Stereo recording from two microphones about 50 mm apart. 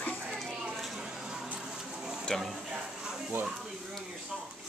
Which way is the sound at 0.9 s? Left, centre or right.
Centre.